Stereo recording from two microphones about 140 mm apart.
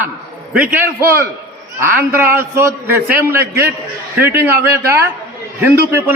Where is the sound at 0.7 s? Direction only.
20° right (ahead or behind).